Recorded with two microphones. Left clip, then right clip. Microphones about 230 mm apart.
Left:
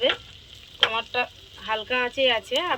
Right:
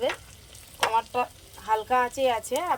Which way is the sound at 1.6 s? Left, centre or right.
Right.